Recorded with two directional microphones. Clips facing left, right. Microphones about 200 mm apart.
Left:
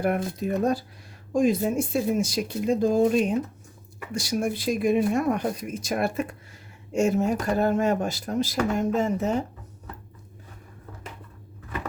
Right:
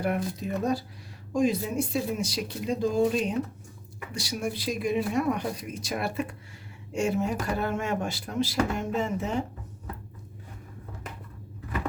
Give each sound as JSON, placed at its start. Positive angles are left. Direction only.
{"t": 0.3, "sound": "speech", "side_deg": 50}